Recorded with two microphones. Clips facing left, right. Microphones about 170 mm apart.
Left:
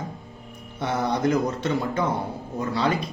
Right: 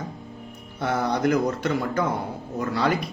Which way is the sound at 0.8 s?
25° left (ahead or behind).